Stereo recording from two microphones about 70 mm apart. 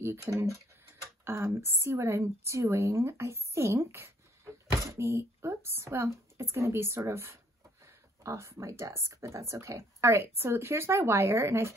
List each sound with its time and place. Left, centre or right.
0.0 s a woman's voice: right